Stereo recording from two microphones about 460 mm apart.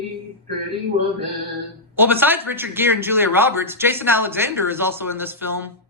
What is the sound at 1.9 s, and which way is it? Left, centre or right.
Speech, centre.